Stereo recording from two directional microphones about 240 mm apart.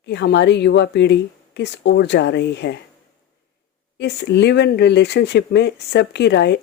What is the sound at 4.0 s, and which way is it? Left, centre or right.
Speech, left.